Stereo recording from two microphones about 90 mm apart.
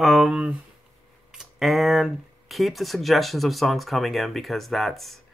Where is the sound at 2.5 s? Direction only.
Centre (ahead or behind).